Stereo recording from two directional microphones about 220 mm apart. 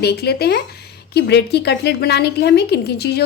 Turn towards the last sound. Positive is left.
turn(degrees=45)  # may be behind; listen again after turning